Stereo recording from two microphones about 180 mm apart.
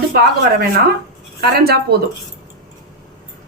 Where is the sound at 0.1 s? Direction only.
55° right (ahead or behind).